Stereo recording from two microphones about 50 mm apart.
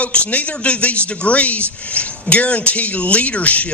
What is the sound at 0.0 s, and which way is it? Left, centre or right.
Speech, left.